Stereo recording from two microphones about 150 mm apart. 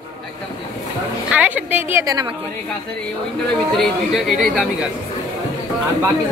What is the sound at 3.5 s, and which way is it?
Speech, 5° left (ahead or behind).